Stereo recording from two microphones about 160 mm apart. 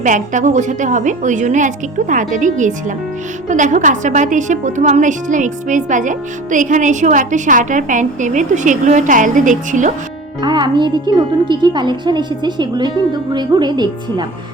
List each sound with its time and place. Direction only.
0.0 s a woman's voice: 50° right (ahead or behind)
10.4 s a woman's voice: 30° right (ahead or behind)